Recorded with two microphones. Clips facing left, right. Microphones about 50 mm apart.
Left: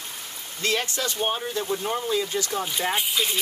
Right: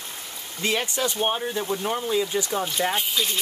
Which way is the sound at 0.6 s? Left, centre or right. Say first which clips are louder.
Right 1 dB; centre.